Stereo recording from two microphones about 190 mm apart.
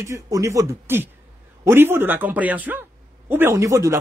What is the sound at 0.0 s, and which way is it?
Speech, 15° right (ahead or behind).